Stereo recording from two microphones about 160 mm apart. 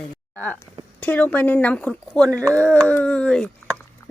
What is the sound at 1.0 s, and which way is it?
Speech, 10° left (ahead or behind).